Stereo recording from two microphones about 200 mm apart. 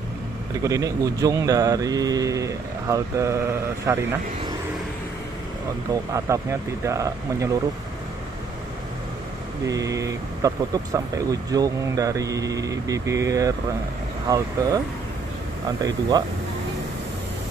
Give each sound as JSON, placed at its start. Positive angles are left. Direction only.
{"t": 0.6, "sound": "speech", "side_deg": -15}
{"t": 6.1, "sound": "speech", "side_deg": -15}
{"t": 9.7, "sound": "speech", "side_deg": -15}
{"t": 15.8, "sound": "speech", "side_deg": -20}